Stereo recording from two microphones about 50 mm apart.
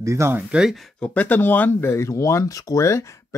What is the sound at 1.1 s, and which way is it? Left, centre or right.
Speech, left.